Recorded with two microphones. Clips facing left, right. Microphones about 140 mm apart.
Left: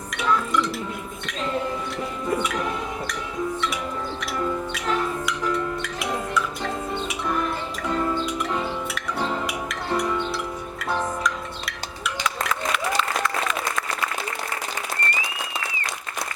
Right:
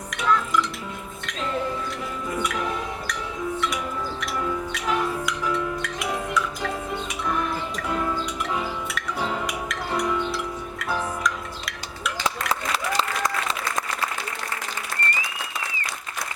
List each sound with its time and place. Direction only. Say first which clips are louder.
0.1 s music: even; centre (ahead or behind)
4.9 s music: even; 5° right (ahead or behind)
8.5 s music: left 1 dB; 5° right (ahead or behind)
12.5 s applause: left 1 dB; 35° right (ahead or behind)